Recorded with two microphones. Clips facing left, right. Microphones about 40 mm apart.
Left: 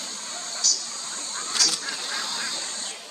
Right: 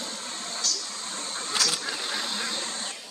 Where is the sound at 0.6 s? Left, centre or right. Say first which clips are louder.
Left 4 dB; right.